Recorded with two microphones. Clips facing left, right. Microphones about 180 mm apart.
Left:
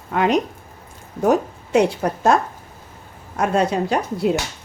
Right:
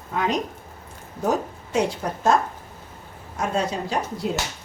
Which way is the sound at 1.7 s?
65° left (ahead or behind).